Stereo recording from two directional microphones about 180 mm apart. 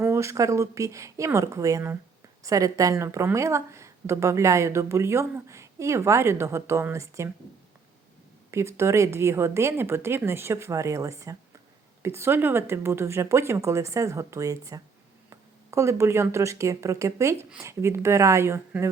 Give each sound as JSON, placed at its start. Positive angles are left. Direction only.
{"t": 0.0, "sound": "speech", "side_deg": -15}
{"t": 8.4, "sound": "speech", "side_deg": -15}